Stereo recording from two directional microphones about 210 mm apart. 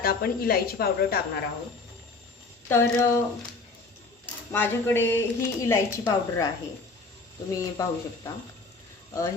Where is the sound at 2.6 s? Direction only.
10° left (ahead or behind).